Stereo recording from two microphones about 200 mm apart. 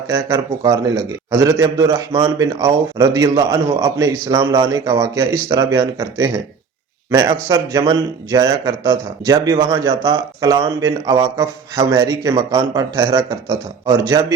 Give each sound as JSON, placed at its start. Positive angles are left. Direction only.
{"t": 0.1, "sound": "speech", "side_deg": -15}